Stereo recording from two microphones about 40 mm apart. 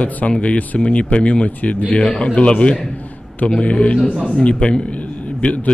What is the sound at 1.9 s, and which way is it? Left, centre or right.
A man's voice, centre.